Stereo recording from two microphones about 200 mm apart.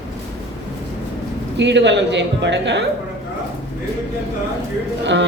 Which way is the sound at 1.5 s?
60° right (ahead or behind).